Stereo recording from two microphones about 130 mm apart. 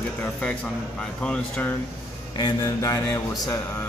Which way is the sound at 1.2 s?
10° left (ahead or behind).